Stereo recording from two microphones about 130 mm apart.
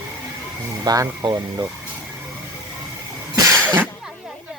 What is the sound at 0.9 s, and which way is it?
Speech, 25° right (ahead or behind).